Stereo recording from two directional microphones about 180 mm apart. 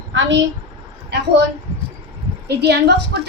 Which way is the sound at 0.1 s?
90° right.